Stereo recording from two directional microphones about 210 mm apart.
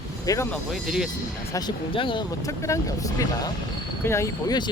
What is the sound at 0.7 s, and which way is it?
Speech, centre (ahead or behind).